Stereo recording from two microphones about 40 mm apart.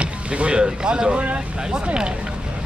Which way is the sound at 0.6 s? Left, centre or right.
Centre.